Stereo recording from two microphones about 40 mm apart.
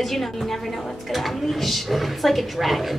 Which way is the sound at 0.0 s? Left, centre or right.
Centre.